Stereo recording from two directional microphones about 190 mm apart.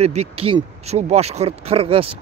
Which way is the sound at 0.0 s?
35° right (ahead or behind).